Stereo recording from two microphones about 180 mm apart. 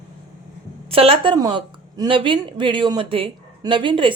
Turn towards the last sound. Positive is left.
turn(degrees=-30)  # may be behind; listen again after turning